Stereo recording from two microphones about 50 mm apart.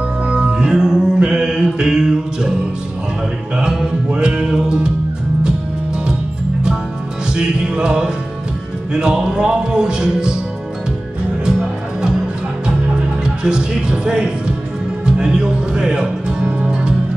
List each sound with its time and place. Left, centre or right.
0.3 s music: centre
3.5 s music: centre
7.3 s music: centre
13.2 s speech: centre
15.0 s music: centre